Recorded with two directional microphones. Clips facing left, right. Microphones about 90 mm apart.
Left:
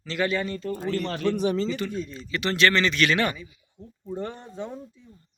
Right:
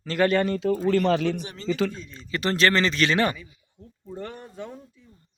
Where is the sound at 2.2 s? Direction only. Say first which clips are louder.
Right 1 dB; 35° right (ahead or behind).